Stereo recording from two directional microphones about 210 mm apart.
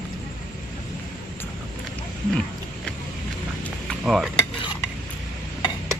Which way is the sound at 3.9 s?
Centre (ahead or behind).